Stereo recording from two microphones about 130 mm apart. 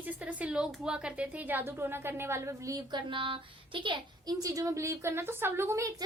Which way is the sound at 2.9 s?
40° right (ahead or behind).